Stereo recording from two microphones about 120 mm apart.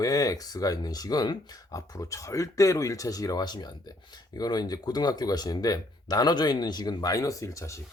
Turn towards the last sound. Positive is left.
turn(degrees=25)  # may be behind; listen again after turning